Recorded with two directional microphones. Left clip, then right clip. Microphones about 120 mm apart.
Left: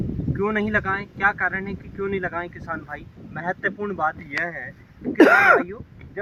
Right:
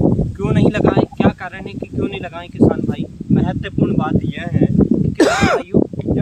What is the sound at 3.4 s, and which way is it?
Speech, 10° right (ahead or behind).